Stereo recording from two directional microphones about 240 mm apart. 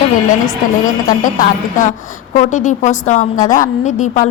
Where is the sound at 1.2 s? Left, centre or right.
Left.